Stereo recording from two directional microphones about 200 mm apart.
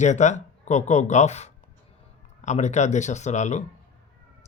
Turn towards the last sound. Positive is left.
turn(degrees=35)  # may be behind; listen again after turning